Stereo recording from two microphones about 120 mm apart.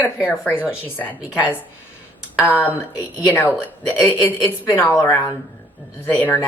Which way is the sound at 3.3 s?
20° left (ahead or behind).